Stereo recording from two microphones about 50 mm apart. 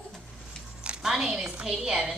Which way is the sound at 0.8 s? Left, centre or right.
Centre.